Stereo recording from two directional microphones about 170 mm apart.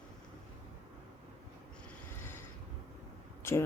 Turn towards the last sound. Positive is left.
turn(degrees=15)  # may be behind; listen again after turning